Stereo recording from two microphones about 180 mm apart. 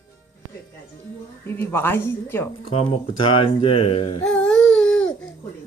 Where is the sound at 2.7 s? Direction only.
30° left (ahead or behind).